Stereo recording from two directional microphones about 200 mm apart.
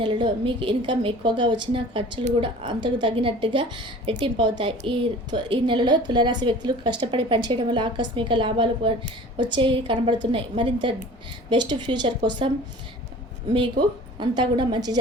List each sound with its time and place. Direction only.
0.0 s a woman's voice: 25° right (ahead or behind)
13.5 s a woman's voice: 25° right (ahead or behind)